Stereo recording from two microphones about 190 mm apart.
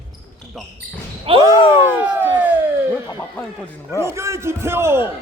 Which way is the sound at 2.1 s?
10° right (ahead or behind).